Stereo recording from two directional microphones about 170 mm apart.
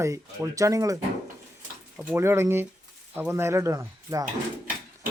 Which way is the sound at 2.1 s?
15° right (ahead or behind).